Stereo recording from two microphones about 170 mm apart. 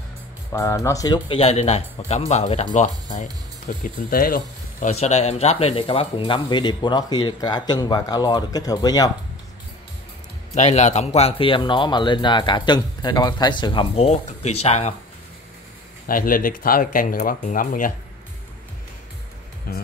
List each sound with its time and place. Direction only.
0.5 s speech: 15° left (ahead or behind); by 3.3 s 45° left (ahead or behind)
3.8 s speech: 60° left (ahead or behind)
4.9 s speech: 40° left (ahead or behind); by 9.1 s 20° left (ahead or behind)
10.5 s speech: 40° left (ahead or behind)
16.1 s speech: 55° left (ahead or behind)
19.7 s speech: 60° left (ahead or behind)